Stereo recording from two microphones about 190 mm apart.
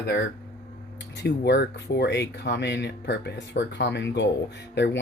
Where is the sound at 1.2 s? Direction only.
60° left (ahead or behind).